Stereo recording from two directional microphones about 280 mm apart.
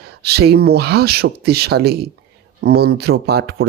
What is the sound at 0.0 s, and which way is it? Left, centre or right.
Speech, right.